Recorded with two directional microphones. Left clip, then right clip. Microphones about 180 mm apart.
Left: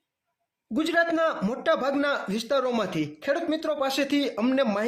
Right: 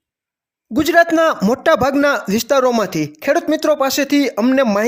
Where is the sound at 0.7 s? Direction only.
45° right (ahead or behind).